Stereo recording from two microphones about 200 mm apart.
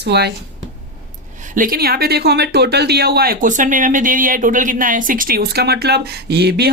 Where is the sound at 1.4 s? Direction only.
40° right (ahead or behind).